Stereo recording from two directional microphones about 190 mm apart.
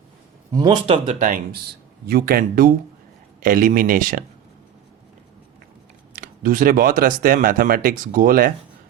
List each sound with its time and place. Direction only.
0.5 s speech: 20° right (ahead or behind)
1.0 s speech: 40° right (ahead or behind)
2.0 s speech: 55° right (ahead or behind)
6.1 s speech: 50° right (ahead or behind)